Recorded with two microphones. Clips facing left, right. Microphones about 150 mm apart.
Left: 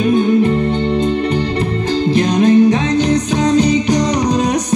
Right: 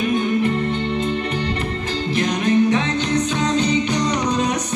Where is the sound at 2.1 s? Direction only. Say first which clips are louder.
Left 6 dB; 35° left (ahead or behind).